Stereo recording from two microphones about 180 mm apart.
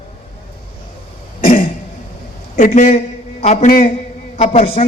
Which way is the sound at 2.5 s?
45° left (ahead or behind).